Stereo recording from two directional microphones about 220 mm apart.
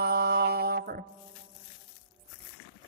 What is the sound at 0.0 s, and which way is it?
Mantra, 45° right (ahead or behind).